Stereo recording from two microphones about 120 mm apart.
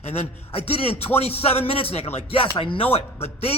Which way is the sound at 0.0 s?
60° left (ahead or behind).